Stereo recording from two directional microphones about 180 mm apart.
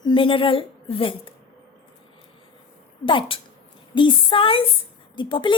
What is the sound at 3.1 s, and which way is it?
Speech, 30° left (ahead or behind).